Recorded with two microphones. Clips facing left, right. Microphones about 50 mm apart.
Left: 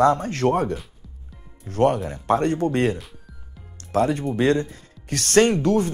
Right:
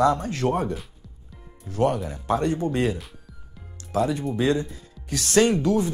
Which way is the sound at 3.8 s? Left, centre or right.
Left.